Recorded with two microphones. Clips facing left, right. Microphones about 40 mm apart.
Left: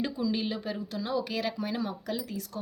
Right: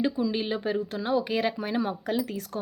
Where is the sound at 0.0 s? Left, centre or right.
Right.